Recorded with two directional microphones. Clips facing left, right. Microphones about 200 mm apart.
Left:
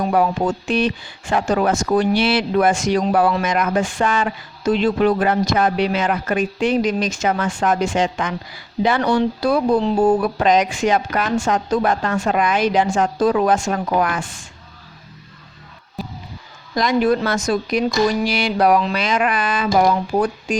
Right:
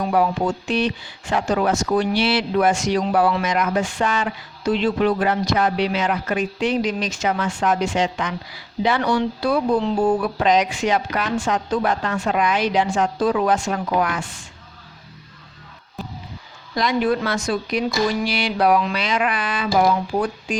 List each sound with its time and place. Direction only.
0.1 s speech: 50° left (ahead or behind)
16.7 s speech: 45° left (ahead or behind)